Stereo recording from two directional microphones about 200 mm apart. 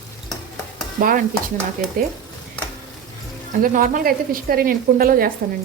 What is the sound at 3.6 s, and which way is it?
A woman's voice, 45° right (ahead or behind).